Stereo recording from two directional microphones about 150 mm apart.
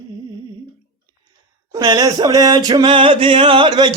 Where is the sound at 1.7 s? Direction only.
25° right (ahead or behind).